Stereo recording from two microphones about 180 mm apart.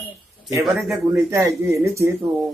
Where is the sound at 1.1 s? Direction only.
15° right (ahead or behind).